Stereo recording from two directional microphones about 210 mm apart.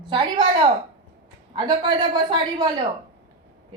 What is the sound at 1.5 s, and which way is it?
Speech, 20° right (ahead or behind).